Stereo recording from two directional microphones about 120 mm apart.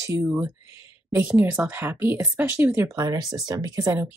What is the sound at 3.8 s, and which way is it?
Speech, 20° right (ahead or behind).